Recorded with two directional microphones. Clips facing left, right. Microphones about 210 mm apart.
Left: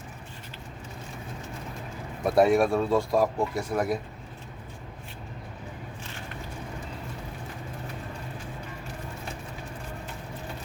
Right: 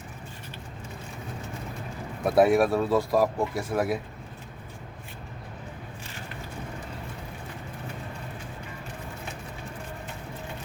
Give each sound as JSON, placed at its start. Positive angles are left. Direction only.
{"t": 2.2, "sound": "a man's voice", "side_deg": 0}